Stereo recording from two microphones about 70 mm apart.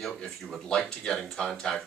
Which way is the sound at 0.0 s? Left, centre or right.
Centre.